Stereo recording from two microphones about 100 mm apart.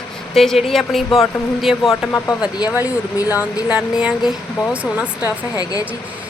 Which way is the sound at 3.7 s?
15° right (ahead or behind).